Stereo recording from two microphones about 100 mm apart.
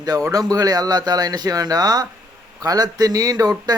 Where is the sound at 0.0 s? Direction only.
40° right (ahead or behind).